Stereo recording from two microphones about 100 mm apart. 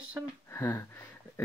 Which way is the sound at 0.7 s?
30° left (ahead or behind).